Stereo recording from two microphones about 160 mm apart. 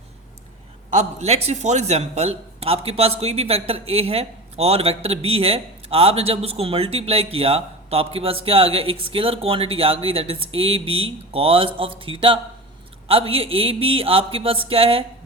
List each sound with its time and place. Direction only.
0.9 s a man's voice: 40° right (ahead or behind)